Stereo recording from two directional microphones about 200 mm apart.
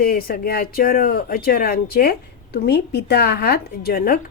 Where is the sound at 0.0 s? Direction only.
50° left (ahead or behind).